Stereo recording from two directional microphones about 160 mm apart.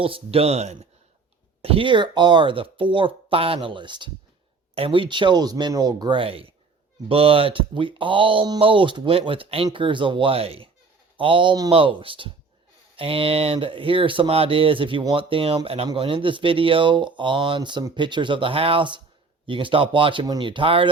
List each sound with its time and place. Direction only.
0.0 s speech: 35° right (ahead or behind)